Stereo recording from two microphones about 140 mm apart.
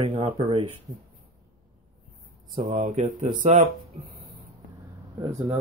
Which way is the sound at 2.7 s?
60° right (ahead or behind).